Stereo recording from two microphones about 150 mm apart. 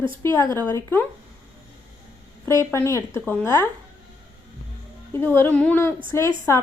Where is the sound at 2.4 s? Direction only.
20° left (ahead or behind).